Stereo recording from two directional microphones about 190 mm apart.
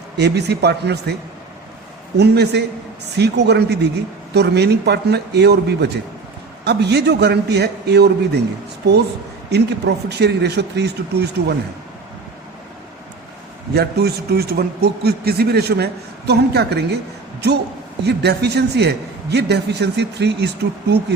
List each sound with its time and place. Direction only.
0.2 s a man's voice: 60° right (ahead or behind)
2.1 s a man's voice: 60° right (ahead or behind)
9.5 s a man's voice: 60° right (ahead or behind)
13.7 s a man's voice: 55° right (ahead or behind)
18.0 s a man's voice: 60° right (ahead or behind)